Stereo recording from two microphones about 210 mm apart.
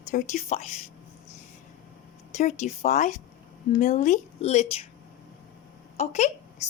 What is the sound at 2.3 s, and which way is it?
Speech, 35° left (ahead or behind).